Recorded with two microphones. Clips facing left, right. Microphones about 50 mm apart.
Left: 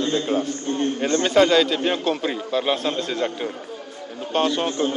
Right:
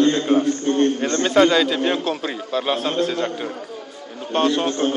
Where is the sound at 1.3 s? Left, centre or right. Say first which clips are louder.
Right 1 dB; centre.